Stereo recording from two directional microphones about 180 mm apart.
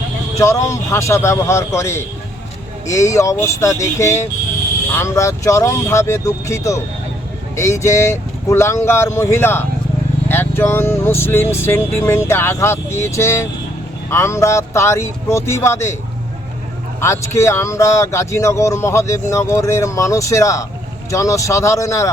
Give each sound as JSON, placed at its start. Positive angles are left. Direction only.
{"t": 0.3, "sound": "speech", "side_deg": 15}
{"t": 17.0, "sound": "speech", "side_deg": 15}